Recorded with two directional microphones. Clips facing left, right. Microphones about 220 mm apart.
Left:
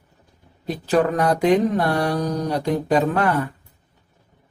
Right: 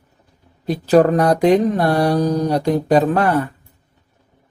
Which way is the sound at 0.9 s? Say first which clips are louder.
Right 6 dB; 40° right (ahead or behind).